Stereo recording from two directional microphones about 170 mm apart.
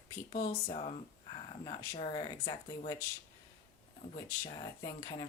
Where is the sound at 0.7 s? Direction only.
35° left (ahead or behind).